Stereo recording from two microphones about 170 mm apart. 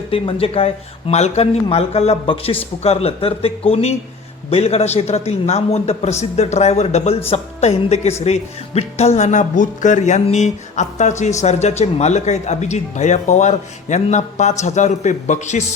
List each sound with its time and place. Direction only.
0.1 s speech: 35° left (ahead or behind)